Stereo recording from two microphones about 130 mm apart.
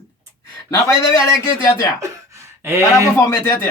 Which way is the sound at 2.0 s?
25° right (ahead or behind).